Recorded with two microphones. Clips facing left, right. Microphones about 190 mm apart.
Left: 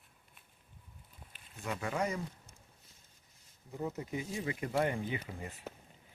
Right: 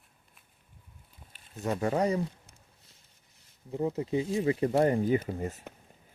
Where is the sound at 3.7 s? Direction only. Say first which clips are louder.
Right 9 dB; 25° right (ahead or behind).